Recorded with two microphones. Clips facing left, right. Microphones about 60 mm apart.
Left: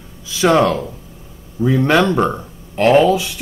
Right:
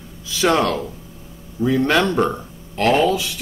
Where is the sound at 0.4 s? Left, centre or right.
Centre.